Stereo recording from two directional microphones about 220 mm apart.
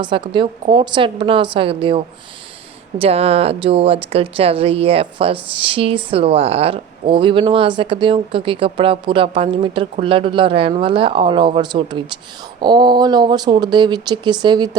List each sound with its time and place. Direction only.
0.0 s speech: 20° right (ahead or behind)